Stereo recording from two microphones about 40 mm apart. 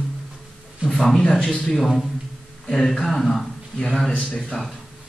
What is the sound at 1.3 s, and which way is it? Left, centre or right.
Speech, left.